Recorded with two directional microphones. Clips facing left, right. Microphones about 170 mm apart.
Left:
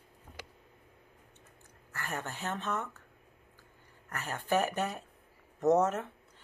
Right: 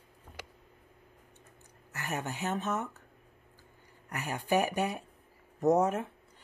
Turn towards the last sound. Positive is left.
turn(degrees=-15)  # may be behind; listen again after turning